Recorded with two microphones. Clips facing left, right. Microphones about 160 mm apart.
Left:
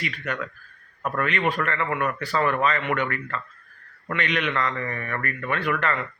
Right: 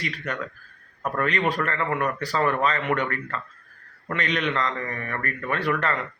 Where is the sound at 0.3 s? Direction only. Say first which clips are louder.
Left 1 dB; 35° right (ahead or behind).